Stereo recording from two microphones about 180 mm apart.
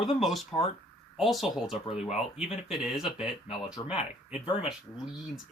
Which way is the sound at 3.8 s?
25° left (ahead or behind).